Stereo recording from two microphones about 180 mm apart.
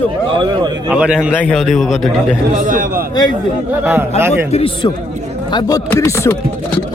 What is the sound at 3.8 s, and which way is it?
Speech, 10° right (ahead or behind).